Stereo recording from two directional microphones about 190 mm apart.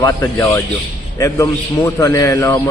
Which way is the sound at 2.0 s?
15° left (ahead or behind).